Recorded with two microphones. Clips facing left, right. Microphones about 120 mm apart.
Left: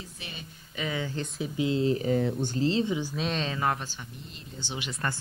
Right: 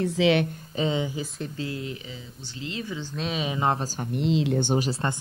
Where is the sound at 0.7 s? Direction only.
25° right (ahead or behind).